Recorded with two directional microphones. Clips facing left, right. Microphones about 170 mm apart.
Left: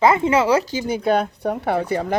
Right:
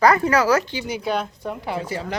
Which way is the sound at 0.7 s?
50° left (ahead or behind).